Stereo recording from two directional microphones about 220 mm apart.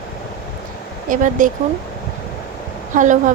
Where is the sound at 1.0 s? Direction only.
35° right (ahead or behind).